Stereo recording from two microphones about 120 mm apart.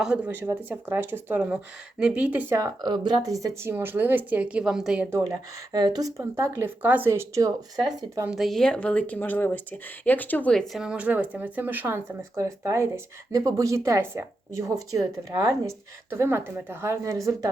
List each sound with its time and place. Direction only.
0.0 s a woman's voice: 5° right (ahead or behind)
0.3 s a woman's voice: 20° right (ahead or behind)
2.6 s a woman's voice: 35° right (ahead or behind); by 5.0 s 5° right (ahead or behind)
5.7 s a woman's voice: 35° right (ahead or behind)
8.3 s a woman's voice: centre (ahead or behind); by 17.5 s 25° right (ahead or behind)